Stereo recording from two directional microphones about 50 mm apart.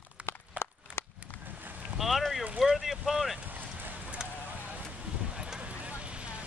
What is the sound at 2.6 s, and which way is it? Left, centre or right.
Boat, centre.